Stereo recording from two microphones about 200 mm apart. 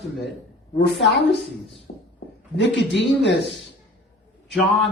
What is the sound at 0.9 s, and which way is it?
Speech, 60° left (ahead or behind).